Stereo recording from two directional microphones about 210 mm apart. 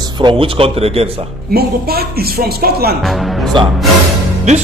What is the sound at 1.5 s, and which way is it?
Speech, 45° right (ahead or behind).